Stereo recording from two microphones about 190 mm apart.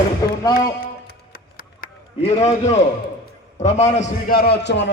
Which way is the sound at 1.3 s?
50° left (ahead or behind).